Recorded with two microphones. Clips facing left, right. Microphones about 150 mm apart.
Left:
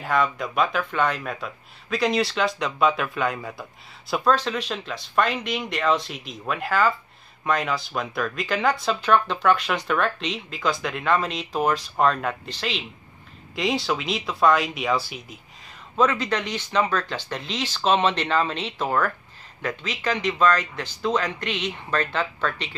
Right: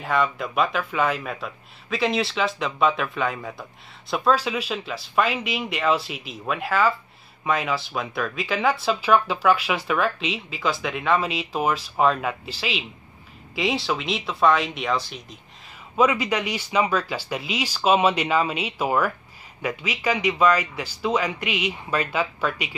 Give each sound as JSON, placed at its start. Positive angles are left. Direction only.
{"t": 0.0, "sound": "speech", "side_deg": 0}
{"t": 16.0, "sound": "speech", "side_deg": -10}